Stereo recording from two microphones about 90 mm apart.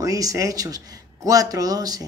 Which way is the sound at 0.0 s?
40° right (ahead or behind).